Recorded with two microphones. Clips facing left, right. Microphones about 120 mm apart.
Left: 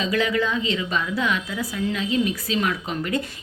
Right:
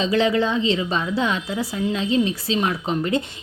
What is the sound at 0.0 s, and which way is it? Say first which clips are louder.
Speech: right 3 dB; 30° right (ahead or behind).